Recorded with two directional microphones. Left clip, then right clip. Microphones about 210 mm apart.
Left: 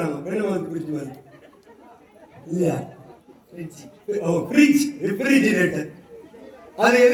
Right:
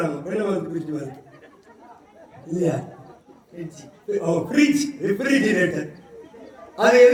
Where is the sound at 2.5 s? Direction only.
15° left (ahead or behind).